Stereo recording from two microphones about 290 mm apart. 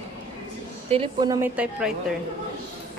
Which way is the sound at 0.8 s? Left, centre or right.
Centre.